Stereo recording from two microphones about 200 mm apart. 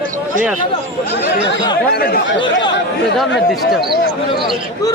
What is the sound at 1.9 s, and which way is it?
Speech, 50° left (ahead or behind).